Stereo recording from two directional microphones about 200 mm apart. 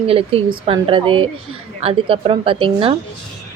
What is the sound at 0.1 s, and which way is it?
A woman's voice, 30° right (ahead or behind).